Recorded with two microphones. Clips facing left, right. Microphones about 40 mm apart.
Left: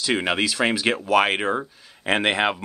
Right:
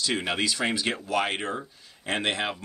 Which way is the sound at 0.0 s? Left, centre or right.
Left.